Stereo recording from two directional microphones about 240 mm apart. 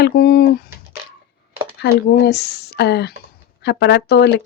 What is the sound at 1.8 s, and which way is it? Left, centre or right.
Speech, left.